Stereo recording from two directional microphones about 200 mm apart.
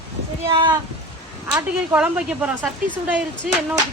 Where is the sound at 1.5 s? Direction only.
5° right (ahead or behind).